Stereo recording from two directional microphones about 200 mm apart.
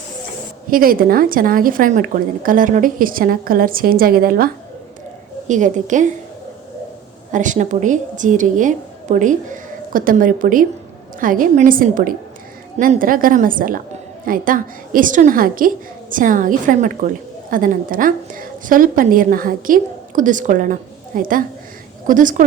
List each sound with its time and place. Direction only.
0.7 s a woman's voice: 45° right (ahead or behind)
7.3 s a woman's voice: 40° right (ahead or behind)